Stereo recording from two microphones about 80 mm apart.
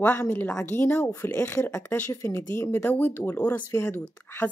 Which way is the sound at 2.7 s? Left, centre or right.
Left.